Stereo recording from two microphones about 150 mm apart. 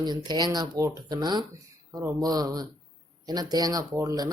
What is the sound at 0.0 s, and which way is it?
Speech, 30° right (ahead or behind).